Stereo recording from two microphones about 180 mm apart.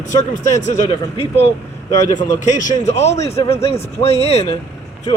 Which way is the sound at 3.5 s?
15° left (ahead or behind).